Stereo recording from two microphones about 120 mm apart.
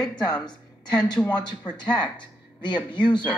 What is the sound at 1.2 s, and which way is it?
Speech, 10° left (ahead or behind).